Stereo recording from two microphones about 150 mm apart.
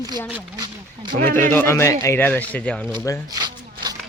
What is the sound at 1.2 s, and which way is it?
Speech, 10° left (ahead or behind).